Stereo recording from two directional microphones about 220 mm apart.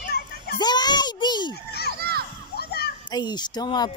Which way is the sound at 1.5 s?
45° left (ahead or behind).